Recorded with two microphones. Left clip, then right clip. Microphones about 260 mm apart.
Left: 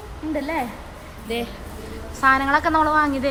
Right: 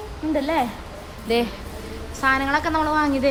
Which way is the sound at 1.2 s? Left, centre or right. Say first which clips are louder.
Right 6 dB; right.